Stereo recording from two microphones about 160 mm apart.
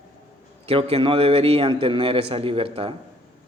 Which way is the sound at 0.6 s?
35° right (ahead or behind).